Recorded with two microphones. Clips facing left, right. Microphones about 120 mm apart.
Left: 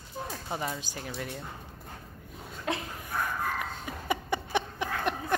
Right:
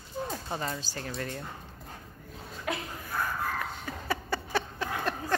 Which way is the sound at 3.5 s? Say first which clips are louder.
Even; 15° left (ahead or behind).